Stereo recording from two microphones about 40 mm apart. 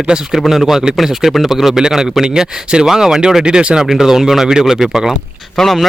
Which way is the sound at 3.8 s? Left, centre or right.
Centre.